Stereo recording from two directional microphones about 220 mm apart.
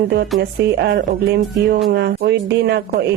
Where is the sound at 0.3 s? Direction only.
50° right (ahead or behind).